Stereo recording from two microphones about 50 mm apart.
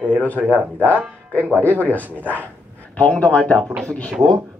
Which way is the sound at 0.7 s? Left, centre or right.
Left.